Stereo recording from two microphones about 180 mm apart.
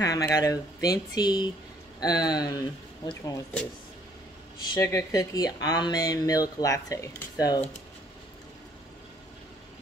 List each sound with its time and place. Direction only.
0.0 s speech: 20° left (ahead or behind)
4.6 s speech: 20° left (ahead or behind)